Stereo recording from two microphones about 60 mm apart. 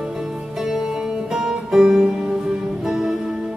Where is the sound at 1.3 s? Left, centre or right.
Centre.